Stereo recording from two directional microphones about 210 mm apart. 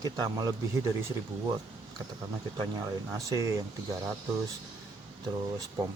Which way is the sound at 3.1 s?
15° right (ahead or behind).